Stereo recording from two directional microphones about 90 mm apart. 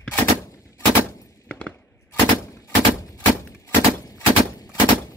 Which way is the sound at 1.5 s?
15° left (ahead or behind).